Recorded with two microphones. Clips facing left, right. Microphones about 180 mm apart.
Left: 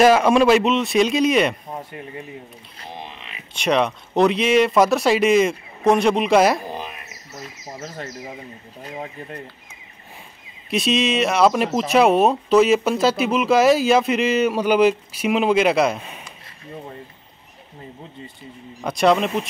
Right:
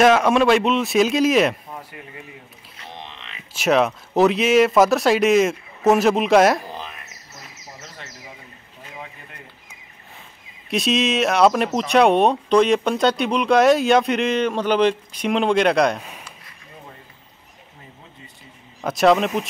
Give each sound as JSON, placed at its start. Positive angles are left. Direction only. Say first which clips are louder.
{"t": 0.0, "sound": "speech", "louder": "left 1 dB", "side_deg": 0}
{"t": 1.7, "sound": "speech", "louder": "left 5 dB", "side_deg": 30}
{"t": 3.0, "sound": "a sound", "louder": "left 2 dB", "side_deg": 10}
{"t": 3.5, "sound": "speech", "louder": "right 2 dB", "side_deg": -5}
{"t": 6.7, "sound": "a sound", "louder": "left 3 dB", "side_deg": 15}
{"t": 8.8, "sound": "speech", "louder": "left 7 dB", "side_deg": 35}
{"t": 10.7, "sound": "speech", "louder": "even", "side_deg": 0}
{"t": 18.4, "sound": "speech", "louder": "right 1 dB", "side_deg": 0}